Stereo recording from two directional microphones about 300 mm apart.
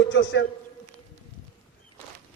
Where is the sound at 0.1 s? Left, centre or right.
Left.